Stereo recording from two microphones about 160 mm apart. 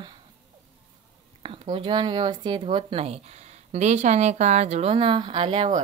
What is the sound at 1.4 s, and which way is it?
Speech, 35° right (ahead or behind).